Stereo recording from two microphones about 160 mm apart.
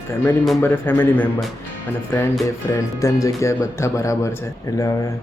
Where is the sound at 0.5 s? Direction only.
15° left (ahead or behind).